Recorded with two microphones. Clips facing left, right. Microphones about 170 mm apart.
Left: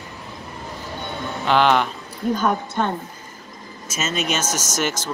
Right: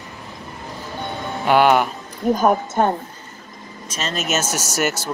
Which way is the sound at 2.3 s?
45° right (ahead or behind).